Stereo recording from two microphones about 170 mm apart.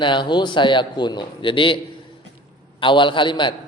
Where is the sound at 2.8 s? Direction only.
30° left (ahead or behind).